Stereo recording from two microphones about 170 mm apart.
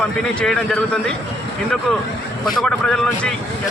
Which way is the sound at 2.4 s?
Centre (ahead or behind).